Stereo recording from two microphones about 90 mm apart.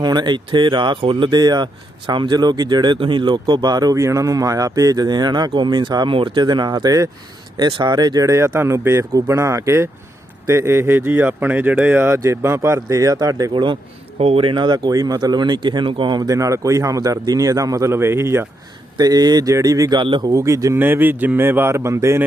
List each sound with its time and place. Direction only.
0.0 s speech: 55° right (ahead or behind)
3.0 s speech: 65° right (ahead or behind); by 3.9 s 50° right (ahead or behind)
3.9 s speech: 35° right (ahead or behind)
7.5 s speech: 55° right (ahead or behind)
8.3 s speech: 35° right (ahead or behind)
13.5 s speech: 65° right (ahead or behind)
14.3 s speech: 80° right; by 18.4 s 30° right (ahead or behind)
18.9 s speech: 50° right (ahead or behind)
20.0 s speech: 65° right (ahead or behind)
20.2 s speech: 35° right (ahead or behind)
20.7 s speech: 20° right (ahead or behind)